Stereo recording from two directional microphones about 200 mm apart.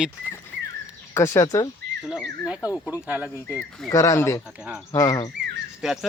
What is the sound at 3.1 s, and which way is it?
Speech, 10° right (ahead or behind).